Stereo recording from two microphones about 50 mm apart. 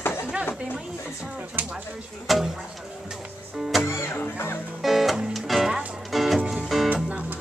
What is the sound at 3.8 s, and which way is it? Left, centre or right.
Music, left.